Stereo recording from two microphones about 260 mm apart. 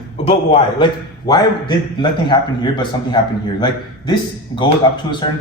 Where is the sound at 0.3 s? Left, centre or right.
Centre.